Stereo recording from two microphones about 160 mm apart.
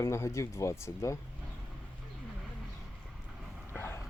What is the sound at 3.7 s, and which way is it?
Dog, 15° left (ahead or behind).